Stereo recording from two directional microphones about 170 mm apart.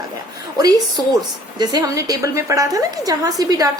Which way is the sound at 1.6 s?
20° right (ahead or behind).